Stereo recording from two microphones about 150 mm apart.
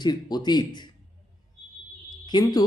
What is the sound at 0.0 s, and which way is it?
Speech, 25° left (ahead or behind).